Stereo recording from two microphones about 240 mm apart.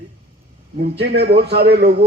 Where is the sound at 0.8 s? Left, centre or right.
Right.